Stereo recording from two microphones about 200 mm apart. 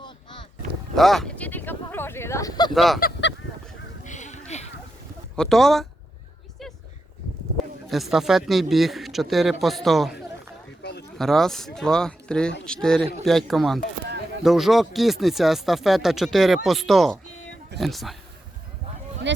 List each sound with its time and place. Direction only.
0.9 s a sound: centre (ahead or behind); by 2.7 s 20° left (ahead or behind)
2.7 s speech: centre (ahead or behind)
3.0 s goose: 60° left (ahead or behind)
4.0 s a sound: 35° left (ahead or behind)
5.4 s speech: centre (ahead or behind)
7.9 s speech: centre (ahead or behind)
11.2 s speech: centre (ahead or behind)